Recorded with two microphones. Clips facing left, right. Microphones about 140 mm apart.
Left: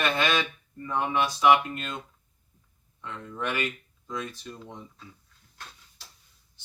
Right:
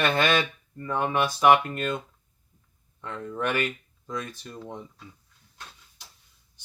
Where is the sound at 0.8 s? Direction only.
45° right (ahead or behind).